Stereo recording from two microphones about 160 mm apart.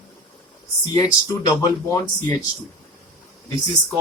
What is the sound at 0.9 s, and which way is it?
Speech, 20° left (ahead or behind).